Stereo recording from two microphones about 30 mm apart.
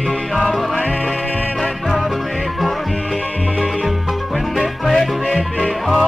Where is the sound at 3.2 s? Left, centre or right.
Left.